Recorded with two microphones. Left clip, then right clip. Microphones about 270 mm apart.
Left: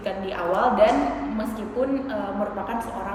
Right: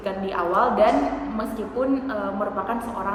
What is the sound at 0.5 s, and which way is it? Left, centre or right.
Speech, centre.